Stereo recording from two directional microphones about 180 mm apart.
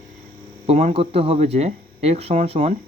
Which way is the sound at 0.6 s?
35° right (ahead or behind).